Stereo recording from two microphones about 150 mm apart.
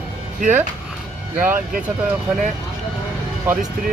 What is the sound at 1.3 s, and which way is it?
Speech, 10° right (ahead or behind).